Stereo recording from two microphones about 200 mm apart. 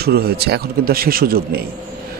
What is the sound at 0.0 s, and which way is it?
A man's voice, 50° right (ahead or behind).